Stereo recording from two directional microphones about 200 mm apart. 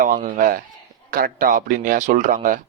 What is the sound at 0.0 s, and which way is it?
Speech, 45° right (ahead or behind).